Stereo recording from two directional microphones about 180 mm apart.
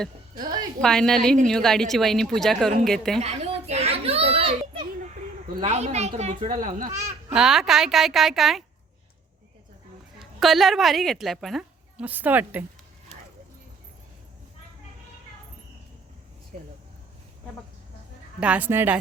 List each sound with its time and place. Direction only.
0.8 s a woman's voice: 5° left (ahead or behind)
3.2 s children playing: 35° right (ahead or behind)
5.5 s speech: 35° right (ahead or behind)
7.3 s a woman's voice: centre (ahead or behind)
10.2 s a woman's voice: centre (ahead or behind)
16.5 s speech: 50° right (ahead or behind)
18.3 s a woman's voice: 5° right (ahead or behind)